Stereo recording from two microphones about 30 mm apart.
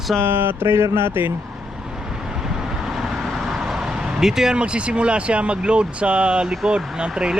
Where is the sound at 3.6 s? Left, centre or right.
Centre.